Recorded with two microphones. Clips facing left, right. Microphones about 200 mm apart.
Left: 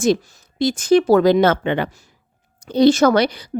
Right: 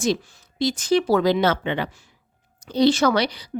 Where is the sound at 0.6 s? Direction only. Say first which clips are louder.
Left 5 dB; 50° left (ahead or behind).